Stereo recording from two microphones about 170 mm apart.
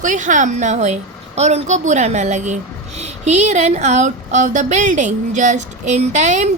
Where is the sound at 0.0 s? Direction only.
50° right (ahead or behind).